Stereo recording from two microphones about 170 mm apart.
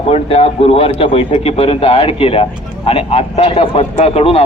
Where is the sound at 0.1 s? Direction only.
35° left (ahead or behind).